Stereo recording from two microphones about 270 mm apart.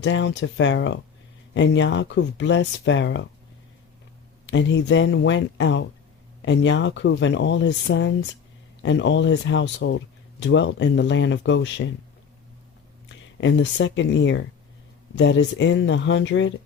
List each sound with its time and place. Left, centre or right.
0.0 s speech: left
4.4 s speech: left
13.1 s speech: left